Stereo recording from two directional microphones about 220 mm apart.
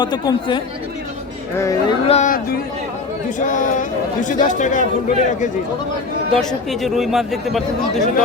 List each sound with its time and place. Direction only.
0.0 s speech: 20° left (ahead or behind)
2.0 s speech: 30° left (ahead or behind)
6.7 s speech: centre (ahead or behind)